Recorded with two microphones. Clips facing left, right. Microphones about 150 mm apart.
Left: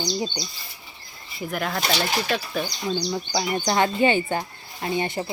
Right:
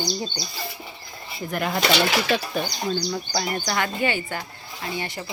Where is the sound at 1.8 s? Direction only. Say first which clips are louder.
Right 6 dB; 75° right (ahead or behind).